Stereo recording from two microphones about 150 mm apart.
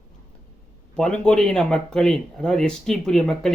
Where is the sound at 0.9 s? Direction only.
5° left (ahead or behind).